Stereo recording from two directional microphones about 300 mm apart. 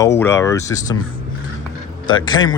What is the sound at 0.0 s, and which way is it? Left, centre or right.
Speech, centre.